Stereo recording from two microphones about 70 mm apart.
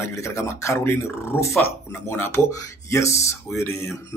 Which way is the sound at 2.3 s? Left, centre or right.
Left.